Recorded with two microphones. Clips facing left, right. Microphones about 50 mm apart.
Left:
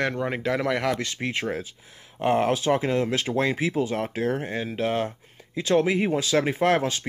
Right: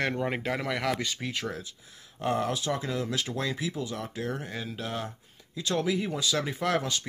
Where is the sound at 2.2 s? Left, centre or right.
Left.